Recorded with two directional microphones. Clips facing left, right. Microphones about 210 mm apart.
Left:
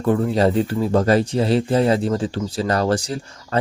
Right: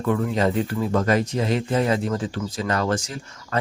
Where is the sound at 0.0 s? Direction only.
35° left (ahead or behind).